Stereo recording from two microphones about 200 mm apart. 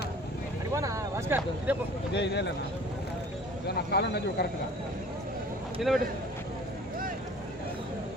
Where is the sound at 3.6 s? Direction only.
55° left (ahead or behind).